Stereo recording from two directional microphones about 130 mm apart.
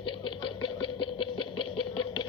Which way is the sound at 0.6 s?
40° left (ahead or behind).